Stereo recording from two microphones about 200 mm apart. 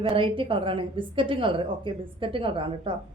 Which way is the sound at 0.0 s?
25° right (ahead or behind).